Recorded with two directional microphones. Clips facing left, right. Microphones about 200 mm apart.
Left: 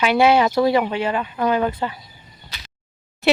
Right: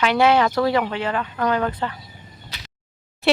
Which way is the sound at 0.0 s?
10° left (ahead or behind).